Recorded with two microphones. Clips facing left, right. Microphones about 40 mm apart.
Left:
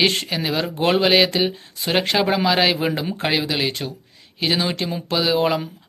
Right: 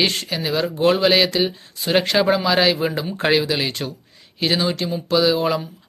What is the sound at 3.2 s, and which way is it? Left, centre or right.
Speech, centre.